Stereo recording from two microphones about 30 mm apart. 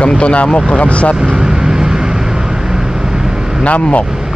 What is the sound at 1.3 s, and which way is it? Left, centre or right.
Vehicle, right.